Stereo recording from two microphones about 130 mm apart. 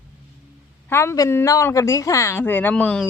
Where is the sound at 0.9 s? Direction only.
20° left (ahead or behind).